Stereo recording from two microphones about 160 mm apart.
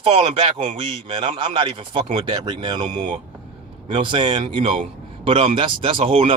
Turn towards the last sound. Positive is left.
turn(degrees=-35)  # may be behind; listen again after turning